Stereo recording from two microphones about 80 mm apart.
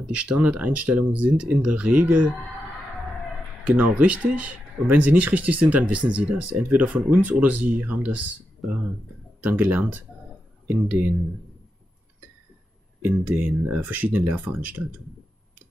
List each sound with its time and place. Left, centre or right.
0.0 s speech: centre
3.6 s speech: centre
13.0 s speech: right